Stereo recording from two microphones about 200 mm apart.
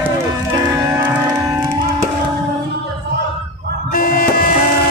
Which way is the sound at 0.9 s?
10° right (ahead or behind).